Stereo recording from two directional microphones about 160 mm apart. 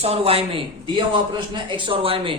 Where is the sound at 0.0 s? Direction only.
40° right (ahead or behind).